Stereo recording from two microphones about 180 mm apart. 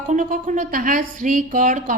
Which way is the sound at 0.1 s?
45° right (ahead or behind).